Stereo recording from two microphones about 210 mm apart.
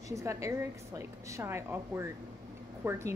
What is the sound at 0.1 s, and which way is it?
A woman's voice, 15° right (ahead or behind).